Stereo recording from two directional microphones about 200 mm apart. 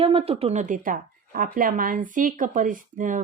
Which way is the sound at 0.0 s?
30° right (ahead or behind).